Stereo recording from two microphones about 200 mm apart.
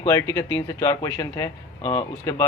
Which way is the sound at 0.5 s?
15° left (ahead or behind).